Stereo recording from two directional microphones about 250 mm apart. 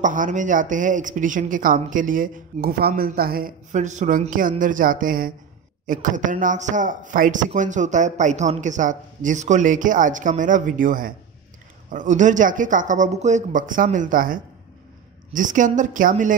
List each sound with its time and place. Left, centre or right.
0.0 s speech: right